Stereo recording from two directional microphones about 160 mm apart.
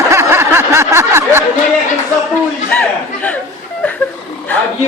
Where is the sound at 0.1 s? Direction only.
15° right (ahead or behind).